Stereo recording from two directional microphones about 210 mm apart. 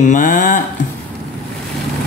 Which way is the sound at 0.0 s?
40° left (ahead or behind).